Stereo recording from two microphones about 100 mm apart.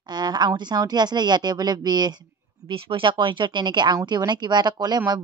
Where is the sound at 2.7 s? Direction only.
60° right (ahead or behind).